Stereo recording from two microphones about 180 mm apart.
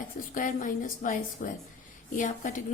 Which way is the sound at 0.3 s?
45° left (ahead or behind).